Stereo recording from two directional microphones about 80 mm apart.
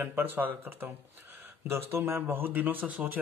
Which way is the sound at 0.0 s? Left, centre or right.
Right.